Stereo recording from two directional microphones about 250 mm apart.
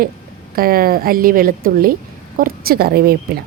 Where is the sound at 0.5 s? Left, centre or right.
Right.